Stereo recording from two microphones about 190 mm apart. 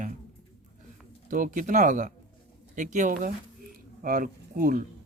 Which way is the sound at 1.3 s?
45° right (ahead or behind).